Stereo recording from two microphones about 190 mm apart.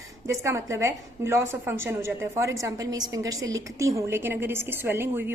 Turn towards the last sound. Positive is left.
turn(degrees=-10)  # may be behind; listen again after turning